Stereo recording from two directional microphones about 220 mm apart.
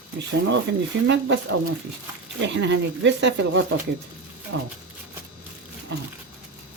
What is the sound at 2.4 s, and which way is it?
Speech, 55° right (ahead or behind).